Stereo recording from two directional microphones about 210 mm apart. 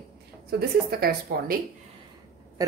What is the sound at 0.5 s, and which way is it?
Speech, 50° right (ahead or behind).